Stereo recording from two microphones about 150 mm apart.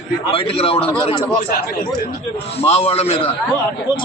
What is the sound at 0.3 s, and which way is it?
Speech, 40° left (ahead or behind).